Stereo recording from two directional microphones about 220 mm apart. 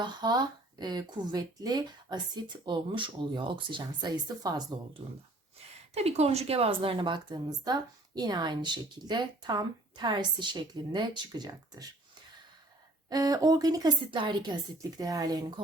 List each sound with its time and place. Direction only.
0.0 s a woman's voice: 20° right (ahead or behind)
5.9 s a woman's voice: 30° right (ahead or behind)
13.1 s a woman's voice: 15° right (ahead or behind)